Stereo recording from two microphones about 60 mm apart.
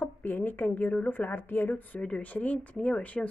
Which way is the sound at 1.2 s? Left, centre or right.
Left.